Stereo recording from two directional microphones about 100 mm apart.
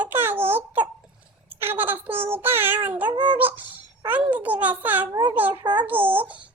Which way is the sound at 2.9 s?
15° right (ahead or behind).